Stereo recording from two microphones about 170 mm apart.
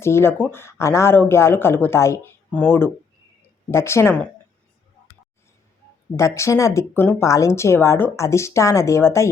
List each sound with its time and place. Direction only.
0.0 s speech: 15° left (ahead or behind)
6.1 s speech: 15° left (ahead or behind)